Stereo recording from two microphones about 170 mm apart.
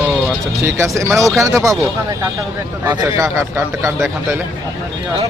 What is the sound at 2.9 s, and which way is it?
A man's voice, 15° right (ahead or behind).